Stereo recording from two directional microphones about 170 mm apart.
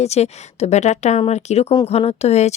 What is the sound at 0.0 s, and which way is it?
A woman's voice, 40° left (ahead or behind).